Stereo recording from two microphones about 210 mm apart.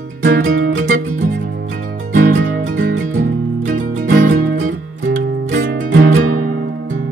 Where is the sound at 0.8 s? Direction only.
40° right (ahead or behind).